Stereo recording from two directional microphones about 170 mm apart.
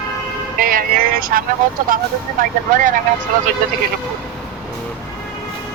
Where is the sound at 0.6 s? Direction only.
55° right (ahead or behind).